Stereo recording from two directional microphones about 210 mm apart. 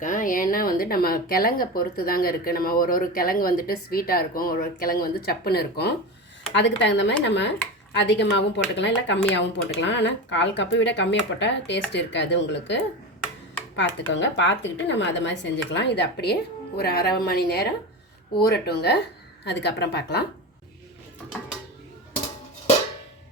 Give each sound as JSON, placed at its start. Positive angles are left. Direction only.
{"t": 0.0, "sound": "speech", "side_deg": 40}